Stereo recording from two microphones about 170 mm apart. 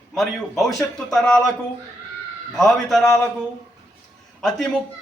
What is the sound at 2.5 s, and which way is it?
Speech, centre (ahead or behind).